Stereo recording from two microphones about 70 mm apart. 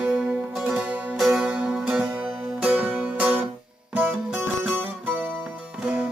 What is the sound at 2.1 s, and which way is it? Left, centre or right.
Music, centre.